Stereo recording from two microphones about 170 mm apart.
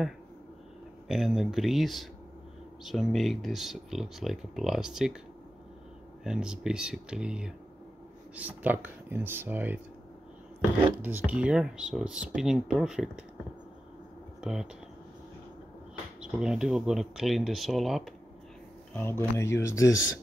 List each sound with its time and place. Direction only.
1.0 s speech: centre (ahead or behind)
6.2 s speech: 5° right (ahead or behind)
11.0 s speech: 10° right (ahead or behind)
14.4 s speech: centre (ahead or behind)
16.2 s speech: 5° right (ahead or behind)
18.9 s speech: 15° left (ahead or behind)